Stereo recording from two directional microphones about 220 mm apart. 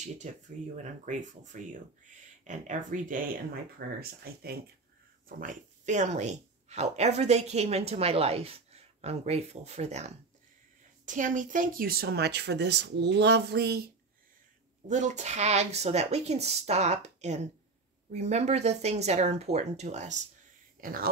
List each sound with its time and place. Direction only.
0.2 s a woman's voice: 35° right (ahead or behind); by 13.8 s 50° right (ahead or behind)
14.9 s a woman's voice: 35° right (ahead or behind)